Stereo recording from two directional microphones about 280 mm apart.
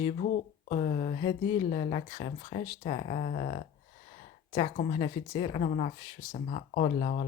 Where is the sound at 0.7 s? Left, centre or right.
Left.